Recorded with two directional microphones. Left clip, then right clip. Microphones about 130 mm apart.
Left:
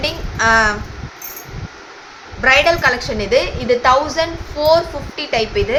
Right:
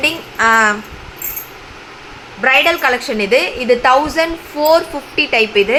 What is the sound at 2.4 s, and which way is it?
Speech, 60° right (ahead or behind).